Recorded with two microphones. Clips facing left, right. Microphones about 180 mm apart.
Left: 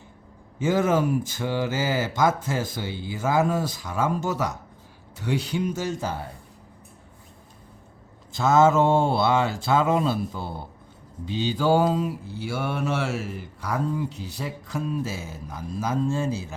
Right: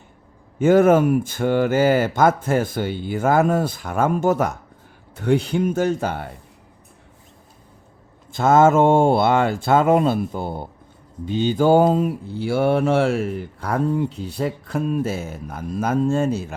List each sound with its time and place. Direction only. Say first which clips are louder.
0.6 s speech: right 8 dB; 55° right (ahead or behind)
8.3 s speech: right 4 dB; 55° right (ahead or behind)